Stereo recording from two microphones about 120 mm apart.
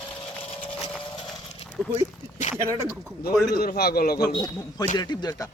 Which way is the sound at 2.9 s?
Centre (ahead or behind).